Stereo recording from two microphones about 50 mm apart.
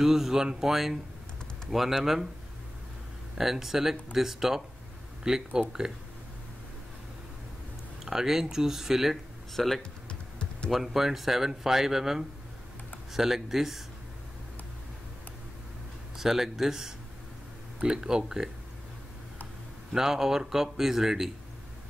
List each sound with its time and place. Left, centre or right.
0.0 s speech: centre
3.3 s speech: centre
8.0 s speech: centre
10.0 s a sound: left
10.7 s speech: centre
16.2 s speech: centre
19.9 s speech: centre